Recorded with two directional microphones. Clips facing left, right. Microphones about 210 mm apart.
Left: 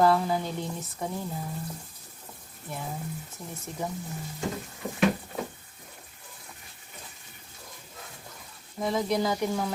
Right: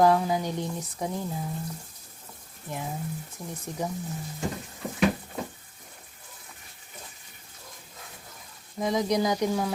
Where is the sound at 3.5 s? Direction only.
15° right (ahead or behind).